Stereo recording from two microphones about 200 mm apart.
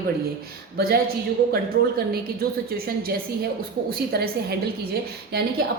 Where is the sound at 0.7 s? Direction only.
50° right (ahead or behind).